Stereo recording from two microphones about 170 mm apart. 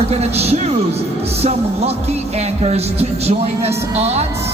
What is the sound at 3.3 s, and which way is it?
Speech, 40° right (ahead or behind).